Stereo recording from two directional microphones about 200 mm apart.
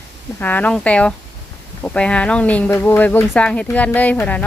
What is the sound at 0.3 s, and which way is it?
Speech, 10° left (ahead or behind).